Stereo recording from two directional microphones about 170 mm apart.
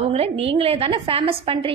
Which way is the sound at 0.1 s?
35° right (ahead or behind).